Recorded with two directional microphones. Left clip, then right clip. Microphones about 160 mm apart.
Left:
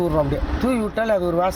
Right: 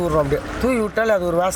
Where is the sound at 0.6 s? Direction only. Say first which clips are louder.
Right 3 dB; 20° right (ahead or behind).